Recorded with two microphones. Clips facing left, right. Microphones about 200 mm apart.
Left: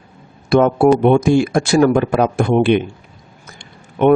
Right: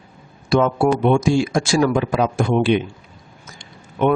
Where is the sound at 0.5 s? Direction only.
55° left (ahead or behind).